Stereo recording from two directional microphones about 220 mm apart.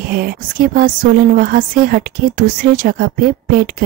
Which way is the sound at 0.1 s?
45° right (ahead or behind).